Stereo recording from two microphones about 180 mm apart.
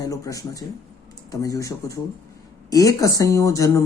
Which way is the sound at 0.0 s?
20° left (ahead or behind).